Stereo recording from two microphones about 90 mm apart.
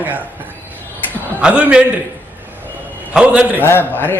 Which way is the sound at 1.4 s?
15° right (ahead or behind).